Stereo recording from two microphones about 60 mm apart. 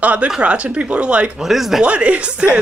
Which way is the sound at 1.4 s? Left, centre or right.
Centre.